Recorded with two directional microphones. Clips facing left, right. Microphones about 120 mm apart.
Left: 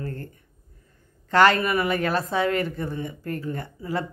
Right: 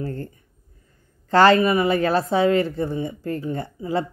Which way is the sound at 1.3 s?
30° right (ahead or behind).